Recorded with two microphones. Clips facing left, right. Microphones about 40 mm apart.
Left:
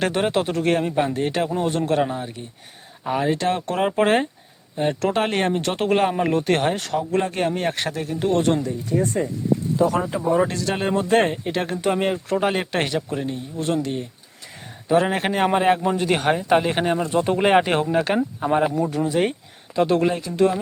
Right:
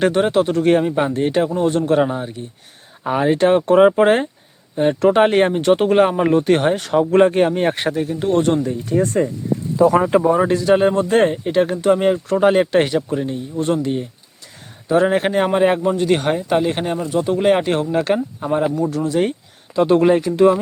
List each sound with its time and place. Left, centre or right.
0.0 s a man's voice: centre
3.0 s speech: centre
3.7 s a man's voice: centre
7.0 s speech: right
7.3 s speech: centre
8.9 s speech: right
10.3 s speech: centre
10.8 s a man's voice: centre
14.8 s a man's voice: centre
17.9 s a man's voice: centre
19.7 s a man's voice: centre
20.3 s speech: centre